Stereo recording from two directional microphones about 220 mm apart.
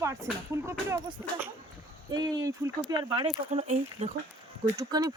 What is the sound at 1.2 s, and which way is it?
Speech, 10° right (ahead or behind).